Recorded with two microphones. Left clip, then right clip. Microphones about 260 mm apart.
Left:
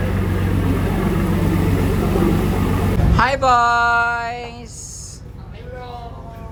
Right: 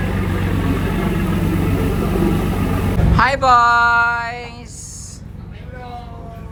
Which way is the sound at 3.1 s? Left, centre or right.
Centre.